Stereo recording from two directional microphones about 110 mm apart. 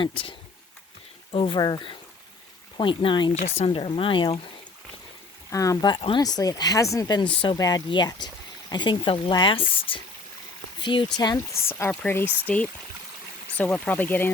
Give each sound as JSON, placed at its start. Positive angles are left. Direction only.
{"t": 0.0, "sound": "speech", "side_deg": 50}
{"t": 3.3, "sound": "speech", "side_deg": 70}
{"t": 5.5, "sound": "speech", "side_deg": 30}
{"t": 5.9, "sound": "speech", "side_deg": 50}
{"t": 6.2, "sound": "speech", "side_deg": 35}
{"t": 7.2, "sound": "speech", "side_deg": 50}
{"t": 7.5, "sound": "speech", "side_deg": 35}
{"t": 10.8, "sound": "a sound", "side_deg": 45}
{"t": 11.5, "sound": "speech", "side_deg": 25}
{"t": 13.6, "sound": "speech", "side_deg": 15}